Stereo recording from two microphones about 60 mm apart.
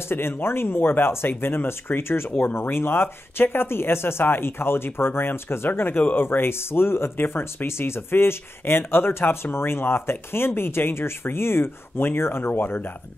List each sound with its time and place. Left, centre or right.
0.0 s speech: left